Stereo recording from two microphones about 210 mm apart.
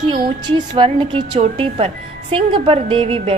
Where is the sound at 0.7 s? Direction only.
25° right (ahead or behind).